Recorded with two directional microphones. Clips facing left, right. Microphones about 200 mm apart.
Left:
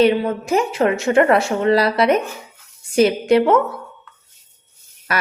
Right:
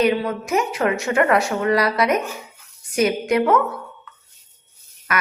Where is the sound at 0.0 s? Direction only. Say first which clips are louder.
Left 4 dB; 30° left (ahead or behind).